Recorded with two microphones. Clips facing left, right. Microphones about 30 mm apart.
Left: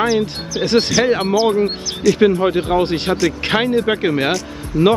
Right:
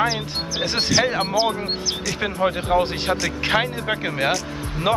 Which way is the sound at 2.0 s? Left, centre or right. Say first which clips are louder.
Left 11 dB; centre.